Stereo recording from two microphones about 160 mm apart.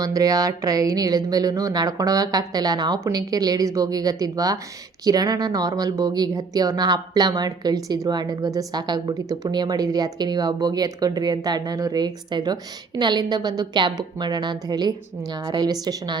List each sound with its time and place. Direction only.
0.0 s speech: 20° right (ahead or behind)